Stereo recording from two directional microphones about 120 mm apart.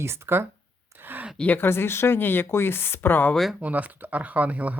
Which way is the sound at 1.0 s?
15° right (ahead or behind).